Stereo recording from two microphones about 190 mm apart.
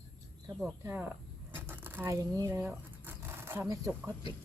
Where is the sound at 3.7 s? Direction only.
15° right (ahead or behind).